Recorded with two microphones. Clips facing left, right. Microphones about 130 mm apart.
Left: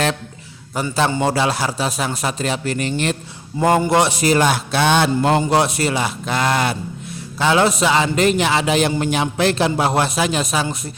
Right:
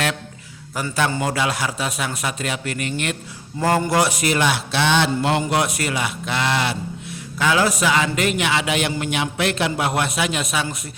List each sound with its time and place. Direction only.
0.8 s speech: 25° left (ahead or behind)
3.6 s speech: 20° left (ahead or behind); by 5.4 s 45° left (ahead or behind)
5.4 s speech: 30° left (ahead or behind); by 7.2 s 45° left (ahead or behind)
7.3 s speech: 30° left (ahead or behind)